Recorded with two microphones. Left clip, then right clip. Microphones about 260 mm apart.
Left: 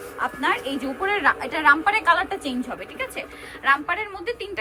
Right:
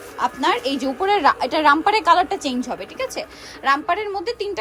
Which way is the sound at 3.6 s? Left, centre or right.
Centre.